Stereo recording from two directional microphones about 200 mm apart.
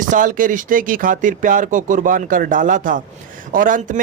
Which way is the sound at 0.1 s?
40° right (ahead or behind).